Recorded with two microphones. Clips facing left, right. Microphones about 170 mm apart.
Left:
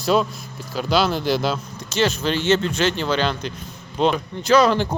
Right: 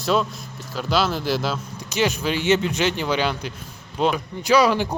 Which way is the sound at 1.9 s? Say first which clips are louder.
Left 2 dB; 15° right (ahead or behind).